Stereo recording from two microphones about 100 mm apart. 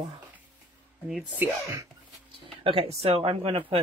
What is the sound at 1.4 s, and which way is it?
Speech, 30° right (ahead or behind).